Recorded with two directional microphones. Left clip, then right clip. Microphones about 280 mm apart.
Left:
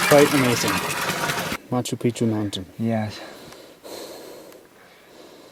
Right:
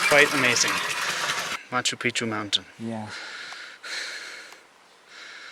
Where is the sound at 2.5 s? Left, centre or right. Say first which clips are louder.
Even; centre.